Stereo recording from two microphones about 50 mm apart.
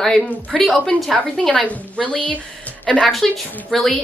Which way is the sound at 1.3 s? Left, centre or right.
Centre.